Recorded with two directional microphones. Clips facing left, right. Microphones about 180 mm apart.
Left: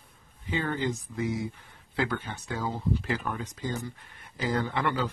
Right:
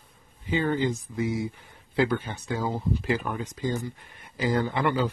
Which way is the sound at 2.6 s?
10° right (ahead or behind).